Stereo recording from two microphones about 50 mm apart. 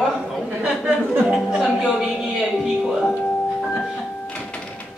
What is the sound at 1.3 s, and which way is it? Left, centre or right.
Music, centre.